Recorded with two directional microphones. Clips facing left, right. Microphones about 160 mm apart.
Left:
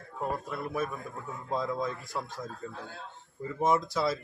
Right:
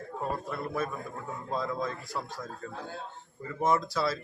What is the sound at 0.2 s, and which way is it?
Speech, 15° left (ahead or behind).